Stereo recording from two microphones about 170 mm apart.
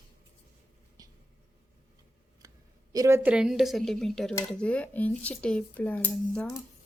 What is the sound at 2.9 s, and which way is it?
A woman's voice, 15° right (ahead or behind).